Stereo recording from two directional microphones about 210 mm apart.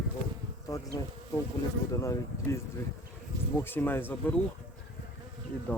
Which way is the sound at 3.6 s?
10° left (ahead or behind).